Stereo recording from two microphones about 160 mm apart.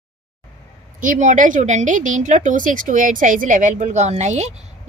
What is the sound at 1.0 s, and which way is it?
Speech, 55° right (ahead or behind).